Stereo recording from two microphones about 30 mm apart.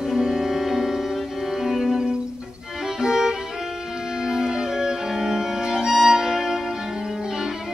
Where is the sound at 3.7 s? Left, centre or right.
Centre.